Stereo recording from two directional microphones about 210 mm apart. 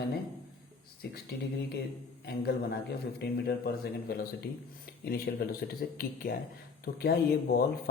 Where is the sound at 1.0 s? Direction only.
55° left (ahead or behind).